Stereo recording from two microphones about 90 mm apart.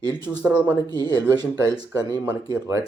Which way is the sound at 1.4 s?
40° right (ahead or behind).